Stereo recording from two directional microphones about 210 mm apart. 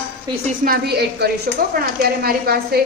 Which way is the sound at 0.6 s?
45° right (ahead or behind).